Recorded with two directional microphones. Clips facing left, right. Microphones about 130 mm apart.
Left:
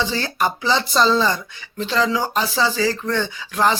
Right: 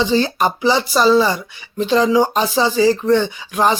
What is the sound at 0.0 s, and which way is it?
Speech, 15° right (ahead or behind).